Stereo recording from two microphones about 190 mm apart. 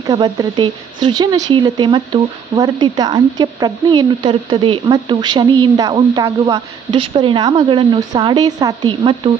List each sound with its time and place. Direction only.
0.1 s speech: 20° right (ahead or behind)